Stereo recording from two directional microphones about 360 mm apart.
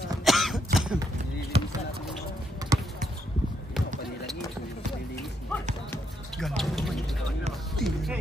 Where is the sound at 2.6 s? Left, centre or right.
Centre.